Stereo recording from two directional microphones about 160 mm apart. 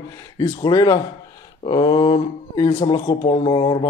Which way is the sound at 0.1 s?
25° left (ahead or behind).